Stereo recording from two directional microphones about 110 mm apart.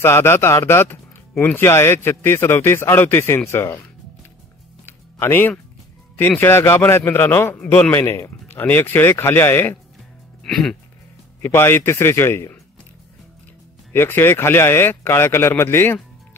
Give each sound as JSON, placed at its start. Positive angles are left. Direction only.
{"t": 0.0, "sound": "a man's voice", "side_deg": 20}
{"t": 4.8, "sound": "music", "side_deg": 20}
{"t": 6.1, "sound": "a man's voice", "side_deg": 20}
{"t": 7.5, "sound": "a man's voice", "side_deg": 10}
{"t": 7.9, "sound": "a man's voice", "side_deg": 20}
{"t": 10.4, "sound": "music", "side_deg": 5}
{"t": 11.4, "sound": "a man's voice", "side_deg": 20}
{"t": 13.9, "sound": "a man's voice", "side_deg": 20}